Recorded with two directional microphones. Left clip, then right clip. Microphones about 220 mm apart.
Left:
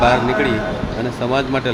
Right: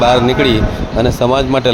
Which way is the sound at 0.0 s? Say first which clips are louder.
Right 4 dB; 35° right (ahead or behind).